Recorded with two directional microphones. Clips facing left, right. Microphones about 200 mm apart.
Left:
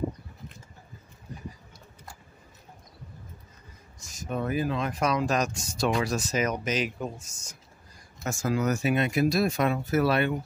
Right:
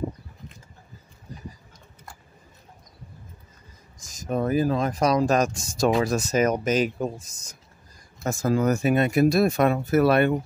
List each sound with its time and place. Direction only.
4.3 s speech: 40° right (ahead or behind)
8.4 s speech: 50° right (ahead or behind)